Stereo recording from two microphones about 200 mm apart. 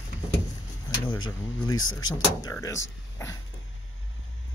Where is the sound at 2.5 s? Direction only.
15° left (ahead or behind).